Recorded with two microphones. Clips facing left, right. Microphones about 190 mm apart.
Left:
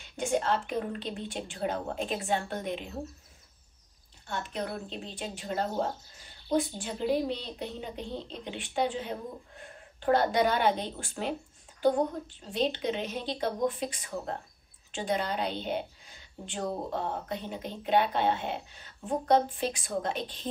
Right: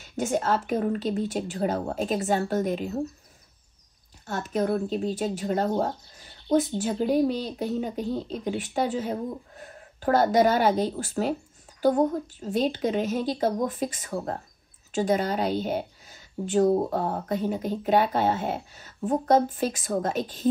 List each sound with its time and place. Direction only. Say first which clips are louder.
0.0 s speech: right 3 dB; 45° right (ahead or behind)
4.3 s speech: right 9 dB; 45° right (ahead or behind)
12.5 s a woman's voice: right 5 dB; 45° right (ahead or behind)